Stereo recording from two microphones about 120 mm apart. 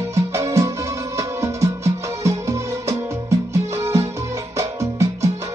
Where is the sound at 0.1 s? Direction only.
25° right (ahead or behind).